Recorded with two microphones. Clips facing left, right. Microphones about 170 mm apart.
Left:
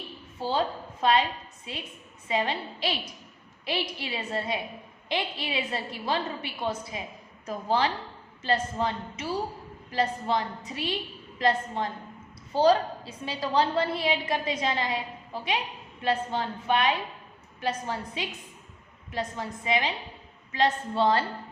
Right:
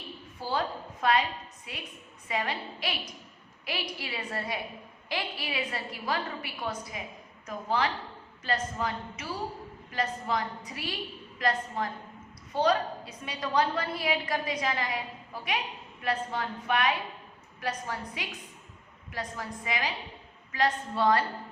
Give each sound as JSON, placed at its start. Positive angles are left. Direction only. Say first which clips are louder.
{"t": 0.3, "sound": "a woman's voice", "louder": "left 4 dB", "side_deg": 25}